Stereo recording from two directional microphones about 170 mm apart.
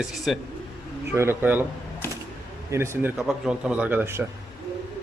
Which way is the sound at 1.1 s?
15° right (ahead or behind).